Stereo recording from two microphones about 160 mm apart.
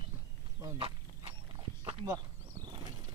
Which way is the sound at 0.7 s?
35° right (ahead or behind).